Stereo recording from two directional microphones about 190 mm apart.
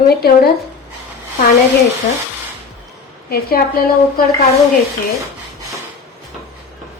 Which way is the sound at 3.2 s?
50° left (ahead or behind).